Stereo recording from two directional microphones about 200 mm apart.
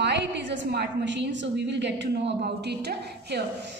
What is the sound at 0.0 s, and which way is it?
A woman's voice, 60° right (ahead or behind).